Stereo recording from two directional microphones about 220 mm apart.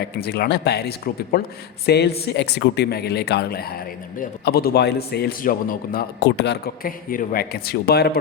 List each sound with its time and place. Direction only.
0.0 s a man's voice: 45° left (ahead or behind)